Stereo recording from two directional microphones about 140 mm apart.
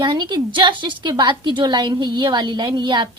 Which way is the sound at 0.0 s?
30° right (ahead or behind).